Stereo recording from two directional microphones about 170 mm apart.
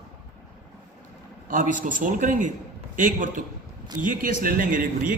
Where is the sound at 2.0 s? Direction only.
50° right (ahead or behind).